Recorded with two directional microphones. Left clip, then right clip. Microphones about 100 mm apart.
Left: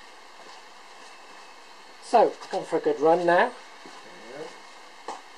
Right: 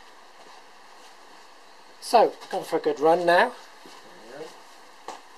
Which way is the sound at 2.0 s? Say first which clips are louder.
Right 1 dB; 40° right (ahead or behind).